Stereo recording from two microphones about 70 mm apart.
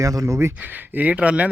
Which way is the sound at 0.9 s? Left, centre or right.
Right.